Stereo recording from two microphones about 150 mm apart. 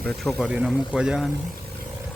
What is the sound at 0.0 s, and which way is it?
A man's voice, centre (ahead or behind).